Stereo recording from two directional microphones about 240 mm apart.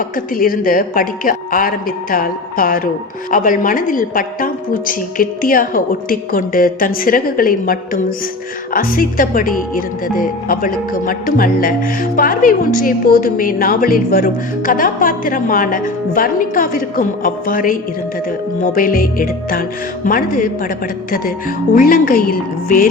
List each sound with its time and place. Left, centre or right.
0.3 s speech: left
21.8 s speech: left